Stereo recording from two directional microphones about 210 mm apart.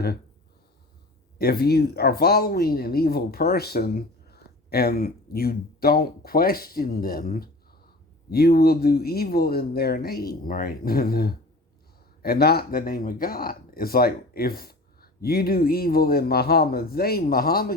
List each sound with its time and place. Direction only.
1.4 s speech: 50° left (ahead or behind)